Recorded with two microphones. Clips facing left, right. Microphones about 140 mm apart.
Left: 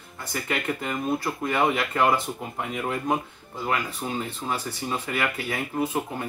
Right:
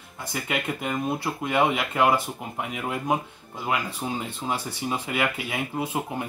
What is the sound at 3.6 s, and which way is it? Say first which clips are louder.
Speech: even; 15° right (ahead or behind).